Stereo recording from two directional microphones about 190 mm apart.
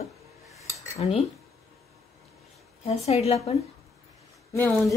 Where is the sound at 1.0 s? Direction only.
30° left (ahead or behind).